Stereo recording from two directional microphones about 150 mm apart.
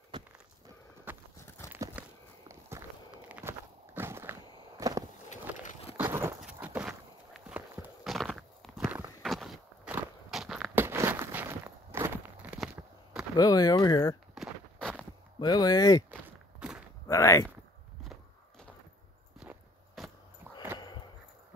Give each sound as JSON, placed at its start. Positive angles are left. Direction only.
{"t": 1.1, "sound": "walk", "side_deg": -10}
{"t": 5.9, "sound": "a sound", "side_deg": -15}
{"t": 6.4, "sound": "walk", "side_deg": -10}
{"t": 8.8, "sound": "clip-clop", "side_deg": -15}
{"t": 9.2, "sound": "walk", "side_deg": 0}
{"t": 10.7, "sound": "walk", "side_deg": -15}
{"t": 13.4, "sound": "speech", "side_deg": 25}
{"t": 14.3, "sound": "a sound", "side_deg": 0}
{"t": 15.4, "sound": "speech", "side_deg": 25}
{"t": 16.1, "sound": "walk", "side_deg": -10}
{"t": 17.1, "sound": "a sound", "side_deg": 20}
{"t": 20.0, "sound": "a sound", "side_deg": 0}